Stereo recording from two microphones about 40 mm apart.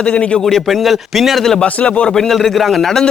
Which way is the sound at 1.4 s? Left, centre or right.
Centre.